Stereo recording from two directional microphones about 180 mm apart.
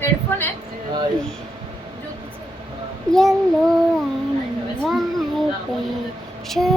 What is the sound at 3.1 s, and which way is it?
Speech, centre (ahead or behind).